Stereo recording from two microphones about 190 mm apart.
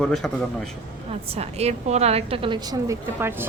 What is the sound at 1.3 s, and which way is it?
A woman's voice, 35° right (ahead or behind).